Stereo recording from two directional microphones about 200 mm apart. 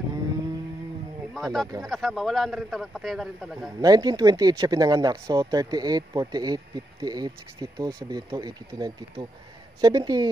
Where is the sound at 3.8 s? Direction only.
20° right (ahead or behind).